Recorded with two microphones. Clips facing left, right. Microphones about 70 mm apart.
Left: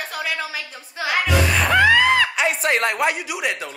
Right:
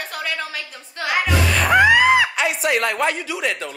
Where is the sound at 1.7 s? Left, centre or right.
Centre.